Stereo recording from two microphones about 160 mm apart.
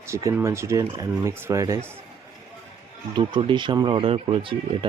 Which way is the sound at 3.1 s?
30° right (ahead or behind).